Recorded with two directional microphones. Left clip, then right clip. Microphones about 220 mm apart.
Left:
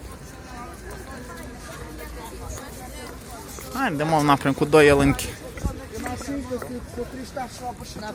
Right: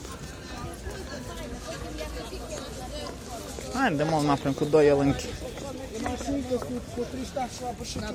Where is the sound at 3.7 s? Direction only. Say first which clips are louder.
Left 3 dB; centre (ahead or behind); by 5.2 s 15° left (ahead or behind).